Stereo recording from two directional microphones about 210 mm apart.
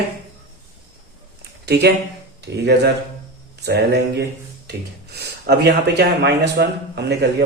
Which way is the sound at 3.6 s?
50° right (ahead or behind).